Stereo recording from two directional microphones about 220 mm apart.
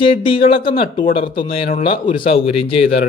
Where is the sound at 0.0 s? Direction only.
25° left (ahead or behind).